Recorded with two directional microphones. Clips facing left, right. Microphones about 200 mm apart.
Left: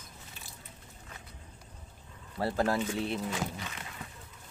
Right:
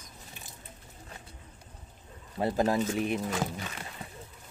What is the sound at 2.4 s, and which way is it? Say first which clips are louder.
Speech: right 3 dB; 20° right (ahead or behind).